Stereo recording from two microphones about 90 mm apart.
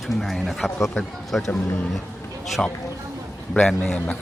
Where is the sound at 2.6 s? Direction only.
10° left (ahead or behind).